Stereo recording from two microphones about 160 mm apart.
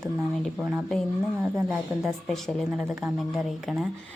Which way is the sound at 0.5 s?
10° right (ahead or behind).